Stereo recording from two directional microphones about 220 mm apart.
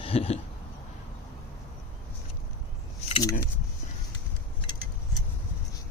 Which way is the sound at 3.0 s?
25° left (ahead or behind).